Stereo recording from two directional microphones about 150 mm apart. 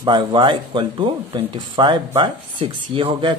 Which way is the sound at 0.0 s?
30° right (ahead or behind).